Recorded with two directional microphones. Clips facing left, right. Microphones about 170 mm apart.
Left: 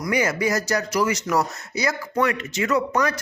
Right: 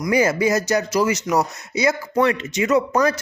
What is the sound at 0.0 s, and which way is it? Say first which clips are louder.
Speech: right 4 dB; 30° right (ahead or behind).